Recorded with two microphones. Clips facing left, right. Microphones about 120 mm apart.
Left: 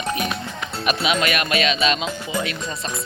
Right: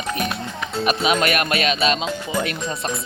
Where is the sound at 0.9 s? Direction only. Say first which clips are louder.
Right 1 dB; 40° right (ahead or behind).